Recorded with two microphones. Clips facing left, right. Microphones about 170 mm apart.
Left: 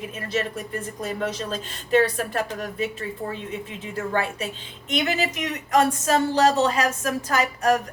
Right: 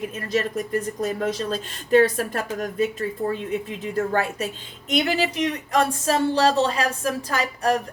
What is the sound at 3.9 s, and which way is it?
A woman's voice, 45° right (ahead or behind).